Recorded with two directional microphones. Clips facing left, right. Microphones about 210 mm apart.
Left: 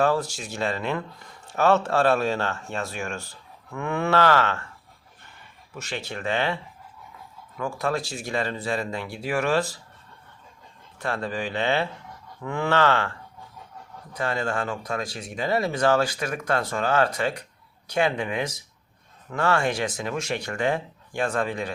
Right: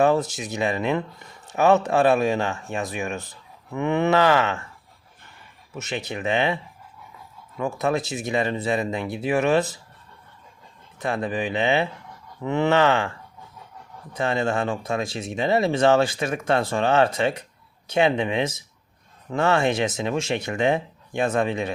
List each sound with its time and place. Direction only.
0.0 s speech: 20° right (ahead or behind)
5.7 s speech: 20° right (ahead or behind)
7.6 s speech: 20° right (ahead or behind)
11.0 s speech: 20° right (ahead or behind)
14.1 s speech: 25° right (ahead or behind)